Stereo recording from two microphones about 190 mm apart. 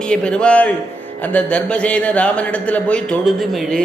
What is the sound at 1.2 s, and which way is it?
A man's voice, 5° left (ahead or behind).